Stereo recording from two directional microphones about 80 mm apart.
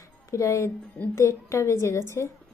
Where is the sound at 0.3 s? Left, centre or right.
Left.